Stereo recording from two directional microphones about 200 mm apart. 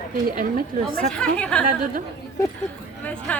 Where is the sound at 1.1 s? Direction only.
5° left (ahead or behind).